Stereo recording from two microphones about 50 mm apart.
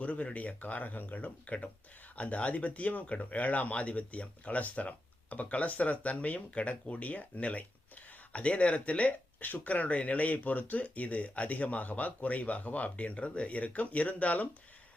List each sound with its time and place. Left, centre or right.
0.0 s speech: left